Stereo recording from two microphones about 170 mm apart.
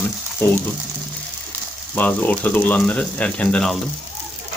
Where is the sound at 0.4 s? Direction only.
15° left (ahead or behind).